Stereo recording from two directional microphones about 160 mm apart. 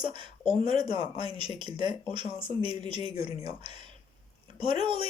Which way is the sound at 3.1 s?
40° left (ahead or behind).